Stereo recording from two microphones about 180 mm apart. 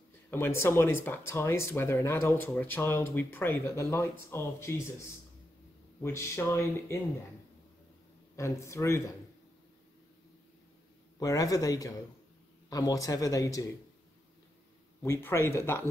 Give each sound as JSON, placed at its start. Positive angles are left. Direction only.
{"t": 0.3, "sound": "speech", "side_deg": 15}
{"t": 6.0, "sound": "speech", "side_deg": 15}
{"t": 8.4, "sound": "speech", "side_deg": 15}
{"t": 11.1, "sound": "speech", "side_deg": 20}
{"t": 15.0, "sound": "speech", "side_deg": 10}